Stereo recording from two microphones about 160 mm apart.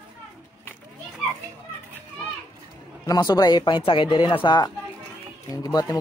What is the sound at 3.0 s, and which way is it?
Speech, 25° left (ahead or behind).